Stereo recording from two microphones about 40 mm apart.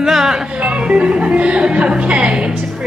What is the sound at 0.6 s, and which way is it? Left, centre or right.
Music, right.